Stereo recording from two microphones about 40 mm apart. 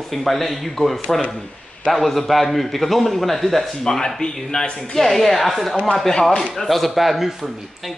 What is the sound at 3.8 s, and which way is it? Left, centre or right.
Speech, centre.